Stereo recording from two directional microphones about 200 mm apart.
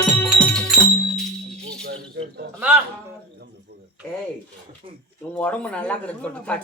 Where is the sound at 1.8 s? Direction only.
55° right (ahead or behind).